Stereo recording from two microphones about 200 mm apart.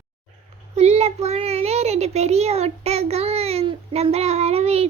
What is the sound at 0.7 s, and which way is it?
A child's voice, 35° right (ahead or behind).